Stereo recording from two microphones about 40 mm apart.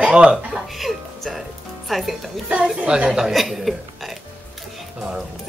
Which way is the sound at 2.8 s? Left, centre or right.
Right.